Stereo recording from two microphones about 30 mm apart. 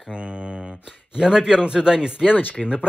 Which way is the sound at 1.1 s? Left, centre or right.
Right.